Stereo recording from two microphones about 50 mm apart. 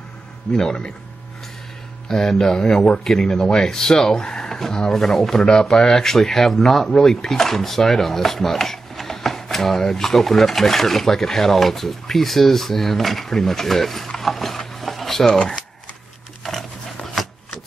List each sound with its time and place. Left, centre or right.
0.6 s speech: centre
2.0 s speech: centre
17.0 s chopping: centre